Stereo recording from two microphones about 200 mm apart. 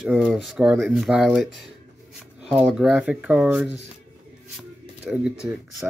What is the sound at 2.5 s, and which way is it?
Speech, 5° right (ahead or behind).